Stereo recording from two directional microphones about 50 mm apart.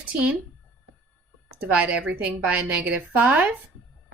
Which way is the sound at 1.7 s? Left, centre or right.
Right.